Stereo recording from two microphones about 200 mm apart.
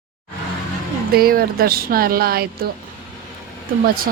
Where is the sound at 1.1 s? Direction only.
50° right (ahead or behind).